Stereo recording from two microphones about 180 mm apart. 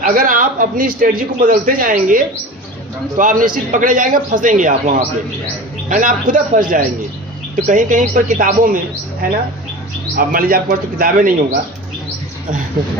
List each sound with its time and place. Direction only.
0.0 s a man's voice: 50° right (ahead or behind)